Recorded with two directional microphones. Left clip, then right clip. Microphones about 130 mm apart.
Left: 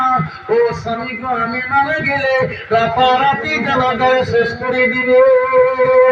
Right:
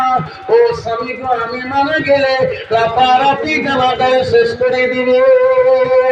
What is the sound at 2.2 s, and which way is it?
A man's voice, 45° right (ahead or behind).